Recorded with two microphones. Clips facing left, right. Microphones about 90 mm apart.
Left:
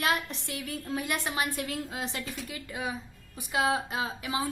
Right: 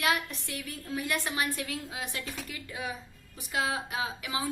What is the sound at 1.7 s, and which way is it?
Speech, 40° left (ahead or behind).